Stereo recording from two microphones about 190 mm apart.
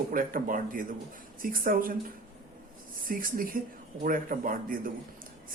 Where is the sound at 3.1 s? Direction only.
50° right (ahead or behind).